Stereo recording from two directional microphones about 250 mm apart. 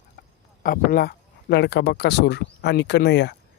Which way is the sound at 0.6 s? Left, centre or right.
Left.